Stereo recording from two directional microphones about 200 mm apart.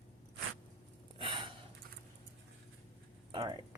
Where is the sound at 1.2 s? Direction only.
25° right (ahead or behind).